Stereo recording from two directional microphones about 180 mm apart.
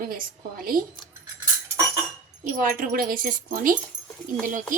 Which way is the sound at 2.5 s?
50° right (ahead or behind).